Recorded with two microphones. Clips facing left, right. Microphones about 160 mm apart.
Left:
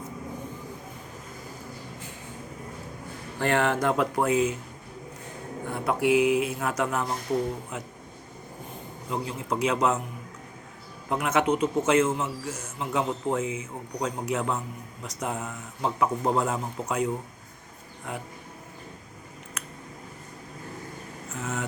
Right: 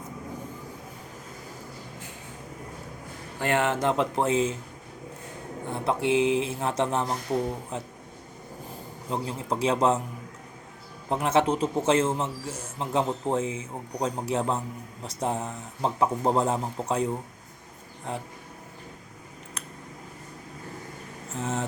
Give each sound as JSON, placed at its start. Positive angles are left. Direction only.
{"t": 3.3, "sound": "speech", "side_deg": -20}
{"t": 5.7, "sound": "a man's voice", "side_deg": -25}
{"t": 9.0, "sound": "a man's voice", "side_deg": -30}
{"t": 11.1, "sound": "a man's voice", "side_deg": -30}
{"t": 18.1, "sound": "a man's voice", "side_deg": -30}
{"t": 21.3, "sound": "a man's voice", "side_deg": -30}